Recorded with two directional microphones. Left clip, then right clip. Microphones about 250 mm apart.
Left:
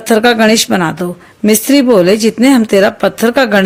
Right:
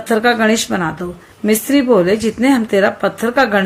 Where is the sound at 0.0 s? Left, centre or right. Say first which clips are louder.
Left 5 dB; left.